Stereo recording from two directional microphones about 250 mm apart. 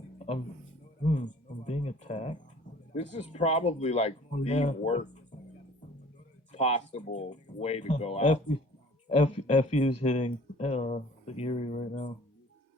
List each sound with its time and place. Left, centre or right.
1.0 s speech: left
6.5 s speech: left